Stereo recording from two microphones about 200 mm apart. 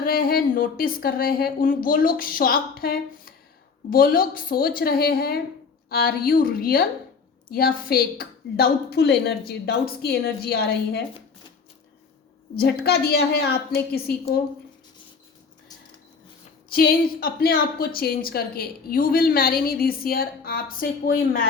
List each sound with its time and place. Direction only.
0.0 s a woman's voice: 50° left (ahead or behind)
12.6 s a woman's voice: 50° left (ahead or behind)
16.7 s a woman's voice: 50° left (ahead or behind)